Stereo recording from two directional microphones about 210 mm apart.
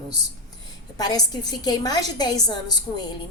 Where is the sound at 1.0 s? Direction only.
20° left (ahead or behind).